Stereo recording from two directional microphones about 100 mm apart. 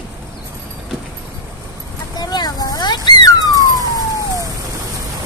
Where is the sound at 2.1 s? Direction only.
45° left (ahead or behind).